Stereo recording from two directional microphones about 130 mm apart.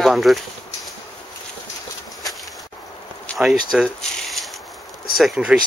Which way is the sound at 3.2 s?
Centre (ahead or behind).